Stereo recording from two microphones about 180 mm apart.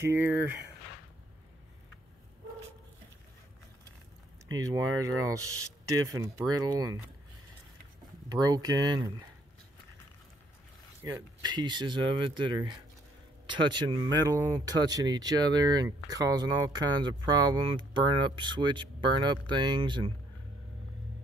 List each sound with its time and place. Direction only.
0.0 s speech: 10° right (ahead or behind)
4.5 s speech: 20° right (ahead or behind)
8.3 s speech: 20° right (ahead or behind)
11.0 s speech: 20° right (ahead or behind)